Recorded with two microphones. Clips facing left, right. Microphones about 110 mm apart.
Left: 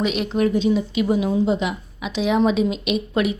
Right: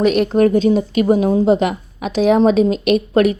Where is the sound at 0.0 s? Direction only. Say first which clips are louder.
Right 7 dB; 50° right (ahead or behind).